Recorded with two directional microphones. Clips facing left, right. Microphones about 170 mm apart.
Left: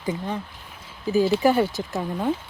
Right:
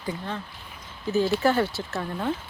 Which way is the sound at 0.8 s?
10° left (ahead or behind).